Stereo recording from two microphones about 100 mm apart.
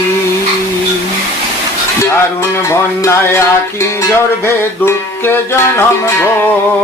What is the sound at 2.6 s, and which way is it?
Music, 25° left (ahead or behind).